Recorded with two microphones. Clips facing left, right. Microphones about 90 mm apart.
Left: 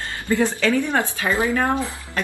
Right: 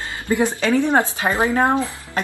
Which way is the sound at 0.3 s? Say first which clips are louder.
Right 1 dB; 20° right (ahead or behind).